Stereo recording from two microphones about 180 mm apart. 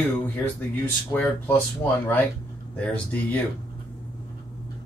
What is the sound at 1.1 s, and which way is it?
Speech, 10° left (ahead or behind).